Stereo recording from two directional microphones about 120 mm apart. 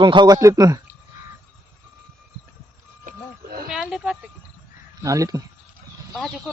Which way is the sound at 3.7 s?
5° right (ahead or behind).